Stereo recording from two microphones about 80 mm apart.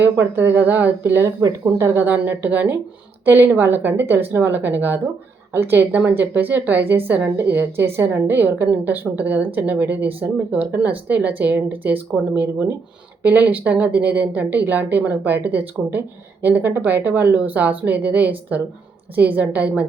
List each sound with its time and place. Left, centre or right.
0.0 s a woman's voice: right
1.8 s speech: right
2.0 s a woman's voice: right